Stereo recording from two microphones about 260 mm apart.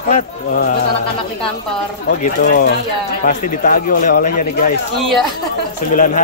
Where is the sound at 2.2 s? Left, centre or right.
Left.